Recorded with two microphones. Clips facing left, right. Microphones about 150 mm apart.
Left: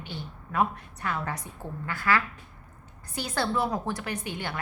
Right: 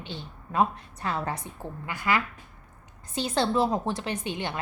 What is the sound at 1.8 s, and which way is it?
A woman's voice, 20° right (ahead or behind).